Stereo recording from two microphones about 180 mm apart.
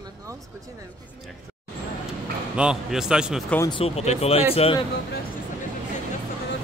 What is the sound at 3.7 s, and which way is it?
Speech, 35° left (ahead or behind).